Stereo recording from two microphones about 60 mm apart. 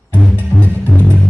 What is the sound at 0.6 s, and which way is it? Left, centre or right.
Music, left.